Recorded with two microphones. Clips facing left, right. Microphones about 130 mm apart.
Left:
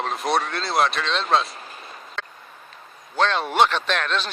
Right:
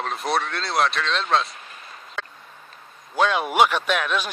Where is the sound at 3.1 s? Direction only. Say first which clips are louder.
Right 1 dB; 10° right (ahead or behind).